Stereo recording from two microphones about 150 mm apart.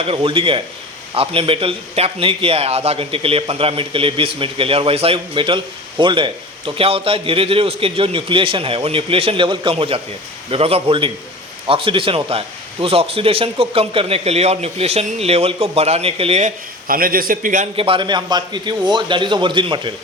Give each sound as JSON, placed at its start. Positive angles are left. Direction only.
{"t": 0.0, "sound": "a man's voice", "side_deg": -40}
{"t": 16.4, "sound": "speech", "side_deg": -70}
{"t": 17.7, "sound": "a man's voice", "side_deg": -35}